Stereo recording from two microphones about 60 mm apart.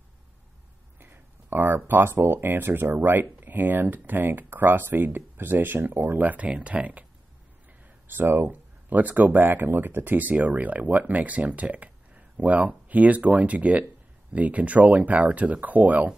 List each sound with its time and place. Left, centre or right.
0.9 s speech: right
8.1 s speech: right